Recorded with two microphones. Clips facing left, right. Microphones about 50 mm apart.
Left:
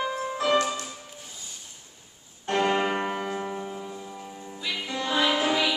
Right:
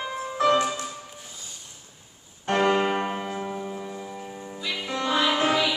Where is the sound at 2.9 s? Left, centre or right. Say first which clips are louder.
Right 1 dB; centre.